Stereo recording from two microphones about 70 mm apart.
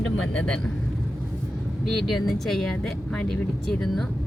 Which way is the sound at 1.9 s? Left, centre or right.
Centre.